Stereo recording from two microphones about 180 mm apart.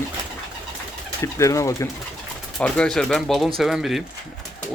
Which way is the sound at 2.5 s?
5° left (ahead or behind).